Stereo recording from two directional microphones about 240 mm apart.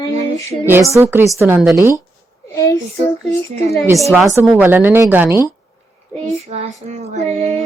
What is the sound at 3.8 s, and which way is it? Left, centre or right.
Speech, centre.